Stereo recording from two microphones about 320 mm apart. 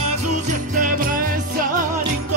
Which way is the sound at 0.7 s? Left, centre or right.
Right.